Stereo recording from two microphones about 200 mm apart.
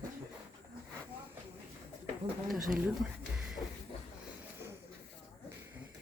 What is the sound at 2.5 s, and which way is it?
Speech, 45° right (ahead or behind).